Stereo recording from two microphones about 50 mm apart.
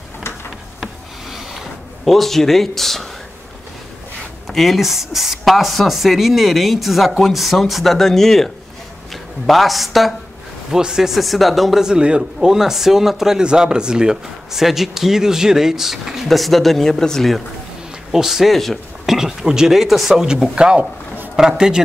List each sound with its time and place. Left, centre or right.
2.0 s speech: centre
4.5 s speech: centre
10.7 s speech: centre
11.8 s speech: centre
18.1 s speech: centre
19.1 s speech: centre